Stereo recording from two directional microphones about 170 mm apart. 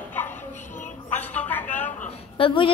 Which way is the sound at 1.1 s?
10° left (ahead or behind).